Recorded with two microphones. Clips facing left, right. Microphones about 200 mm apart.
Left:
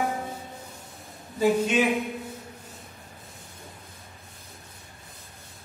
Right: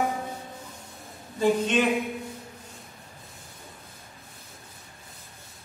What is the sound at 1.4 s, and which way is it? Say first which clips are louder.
Speech: left 1 dB; 5° left (ahead or behind).